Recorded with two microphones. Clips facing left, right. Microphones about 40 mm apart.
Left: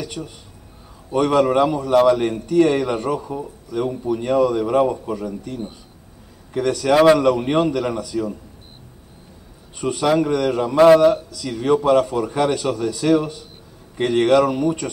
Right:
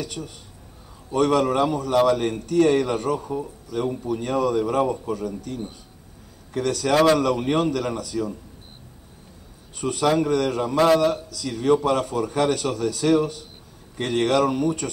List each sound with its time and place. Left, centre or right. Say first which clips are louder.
0.0 s a man's voice: left 2 dB; left
9.8 s a man's voice: left 3 dB; left